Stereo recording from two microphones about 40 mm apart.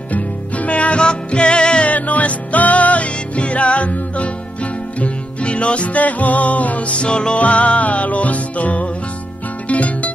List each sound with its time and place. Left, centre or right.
0.1 s music: left
1.9 s music: left
7.3 s music: left